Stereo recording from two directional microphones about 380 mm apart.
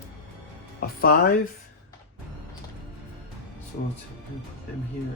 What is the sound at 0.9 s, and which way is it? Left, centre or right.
Speech, left.